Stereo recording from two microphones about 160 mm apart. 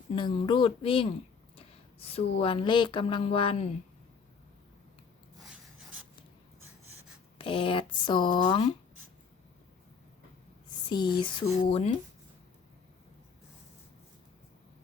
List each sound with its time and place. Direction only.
0.1 s speech: 30° left (ahead or behind)
1.5 s a sound: 40° left (ahead or behind)
2.4 s speech: 35° left (ahead or behind)
7.3 s speech: 30° left (ahead or behind)
10.8 s speech: 30° left (ahead or behind)